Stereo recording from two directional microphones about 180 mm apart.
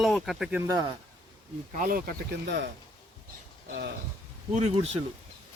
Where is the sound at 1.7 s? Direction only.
50° right (ahead or behind).